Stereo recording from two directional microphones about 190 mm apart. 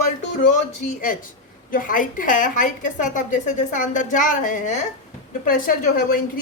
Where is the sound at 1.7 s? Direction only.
45° left (ahead or behind).